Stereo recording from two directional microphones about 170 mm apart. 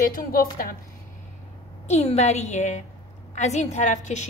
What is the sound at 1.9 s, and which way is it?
A woman's voice, 40° left (ahead or behind).